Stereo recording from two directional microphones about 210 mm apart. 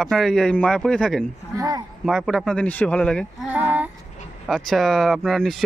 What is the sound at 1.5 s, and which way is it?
Speech, 15° right (ahead or behind).